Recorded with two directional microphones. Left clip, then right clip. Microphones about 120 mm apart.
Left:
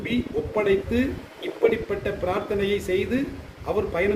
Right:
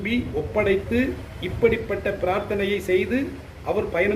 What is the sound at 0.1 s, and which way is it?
A man's voice, 35° left (ahead or behind).